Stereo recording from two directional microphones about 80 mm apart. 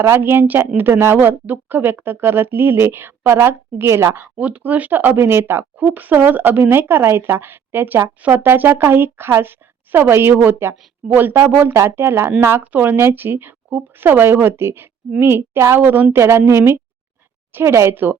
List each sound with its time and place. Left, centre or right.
0.0 s speech: right
4.4 s speech: centre; by 15.8 s right
15.8 s a woman's voice: right